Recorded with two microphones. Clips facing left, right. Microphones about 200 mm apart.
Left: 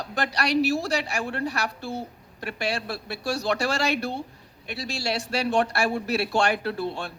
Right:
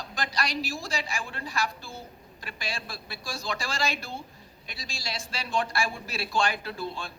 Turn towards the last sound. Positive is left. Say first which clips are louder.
# left 6 dB
turn(degrees=65)  # may be behind; listen again after turning